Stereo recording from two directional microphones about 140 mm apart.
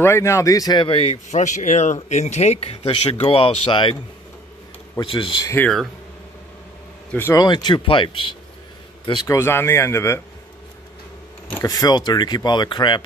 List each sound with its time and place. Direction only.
0.0 s a man's voice: 20° left (ahead or behind); by 3.9 s 35° left (ahead or behind)
5.0 s a man's voice: 35° left (ahead or behind)
7.1 s speech: 15° left (ahead or behind)
7.3 s a man's voice: 30° left (ahead or behind)
9.4 s speech: 15° left (ahead or behind)
11.6 s a man's voice: 25° left (ahead or behind)